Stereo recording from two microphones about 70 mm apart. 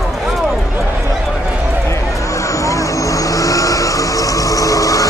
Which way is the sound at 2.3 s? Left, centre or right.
Left.